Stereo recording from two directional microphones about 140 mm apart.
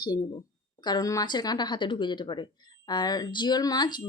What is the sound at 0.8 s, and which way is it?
Speech, 30° left (ahead or behind).